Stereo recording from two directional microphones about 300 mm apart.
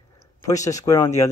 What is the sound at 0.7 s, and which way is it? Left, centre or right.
Speech, centre.